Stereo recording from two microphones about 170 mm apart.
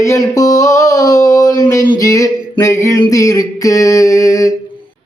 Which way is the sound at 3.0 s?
20° left (ahead or behind).